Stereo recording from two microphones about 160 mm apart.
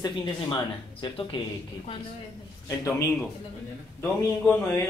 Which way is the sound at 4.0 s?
10° left (ahead or behind).